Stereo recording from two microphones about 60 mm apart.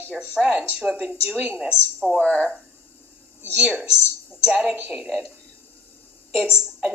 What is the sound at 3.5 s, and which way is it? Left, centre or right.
A woman's voice, centre.